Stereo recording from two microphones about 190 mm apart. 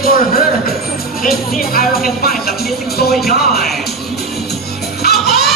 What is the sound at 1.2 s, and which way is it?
Speech, 50° left (ahead or behind).